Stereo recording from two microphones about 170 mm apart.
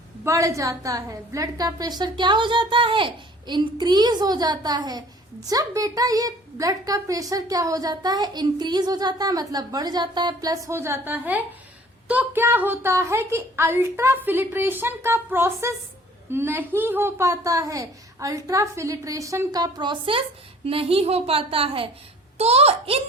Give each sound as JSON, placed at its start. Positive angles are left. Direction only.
{"t": 0.3, "sound": "a woman's voice", "side_deg": -20}